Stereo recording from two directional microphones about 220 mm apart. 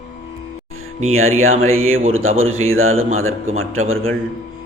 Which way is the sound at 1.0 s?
70° right (ahead or behind).